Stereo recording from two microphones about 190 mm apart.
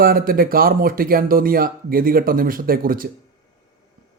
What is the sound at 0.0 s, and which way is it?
Speech, 50° right (ahead or behind).